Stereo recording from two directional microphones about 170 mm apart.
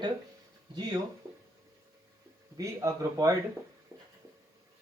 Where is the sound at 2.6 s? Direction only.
20° right (ahead or behind).